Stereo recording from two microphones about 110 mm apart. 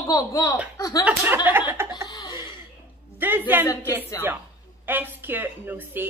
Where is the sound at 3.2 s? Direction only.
15° right (ahead or behind).